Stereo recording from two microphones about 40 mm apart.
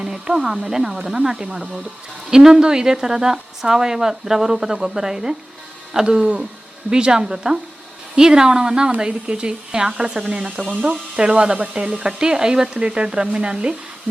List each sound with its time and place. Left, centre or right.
0.0 s speech: centre